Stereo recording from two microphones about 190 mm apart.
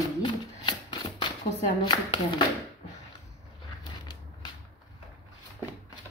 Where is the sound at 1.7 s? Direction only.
25° left (ahead or behind).